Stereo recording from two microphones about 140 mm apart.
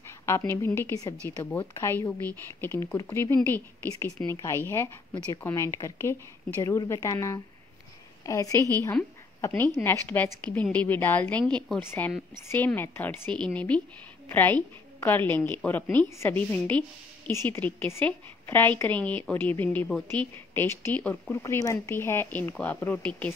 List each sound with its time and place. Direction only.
0.5 s a woman's voice: 20° left (ahead or behind)
9.5 s a woman's voice: 5° left (ahead or behind)